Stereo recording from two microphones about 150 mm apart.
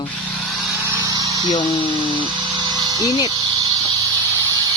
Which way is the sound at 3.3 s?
25° right (ahead or behind).